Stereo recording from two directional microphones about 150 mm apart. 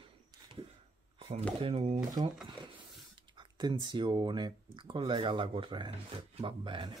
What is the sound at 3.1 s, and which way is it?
Speech, 30° right (ahead or behind).